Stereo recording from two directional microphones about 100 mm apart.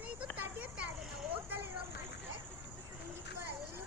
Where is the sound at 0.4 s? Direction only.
15° right (ahead or behind).